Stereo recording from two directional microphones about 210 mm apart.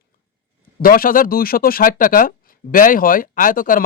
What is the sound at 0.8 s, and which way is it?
Speech, 45° left (ahead or behind).